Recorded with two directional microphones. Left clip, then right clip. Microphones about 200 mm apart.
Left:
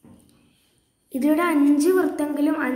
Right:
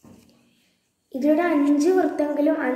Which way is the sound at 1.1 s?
40° left (ahead or behind).